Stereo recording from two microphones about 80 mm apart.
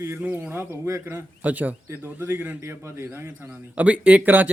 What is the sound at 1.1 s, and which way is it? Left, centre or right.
Speech, centre.